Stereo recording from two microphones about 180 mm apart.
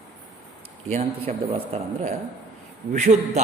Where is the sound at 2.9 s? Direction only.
40° right (ahead or behind).